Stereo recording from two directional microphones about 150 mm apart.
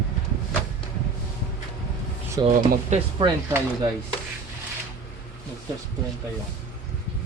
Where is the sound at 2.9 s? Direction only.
50° right (ahead or behind).